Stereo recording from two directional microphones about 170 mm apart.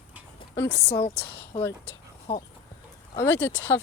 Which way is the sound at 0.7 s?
70° left (ahead or behind).